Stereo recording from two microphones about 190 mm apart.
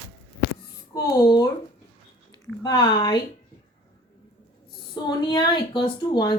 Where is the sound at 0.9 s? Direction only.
20° left (ahead or behind).